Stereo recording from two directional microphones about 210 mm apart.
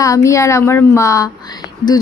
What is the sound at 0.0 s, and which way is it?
A woman's voice, 15° left (ahead or behind).